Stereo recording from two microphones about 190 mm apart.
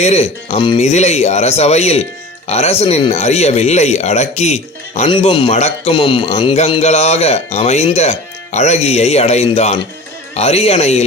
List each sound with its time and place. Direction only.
0.0 s a man's voice: 35° left (ahead or behind)
5.1 s a man's voice: 25° left (ahead or behind)